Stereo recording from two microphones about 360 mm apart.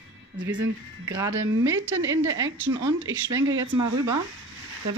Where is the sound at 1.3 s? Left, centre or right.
Right.